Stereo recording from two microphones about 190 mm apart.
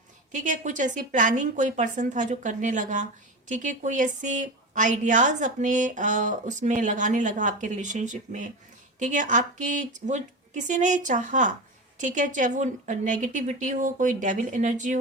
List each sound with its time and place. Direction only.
0.3 s a woman's voice: 40° right (ahead or behind)